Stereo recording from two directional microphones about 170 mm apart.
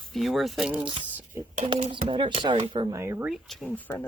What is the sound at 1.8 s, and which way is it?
Speech, 40° right (ahead or behind).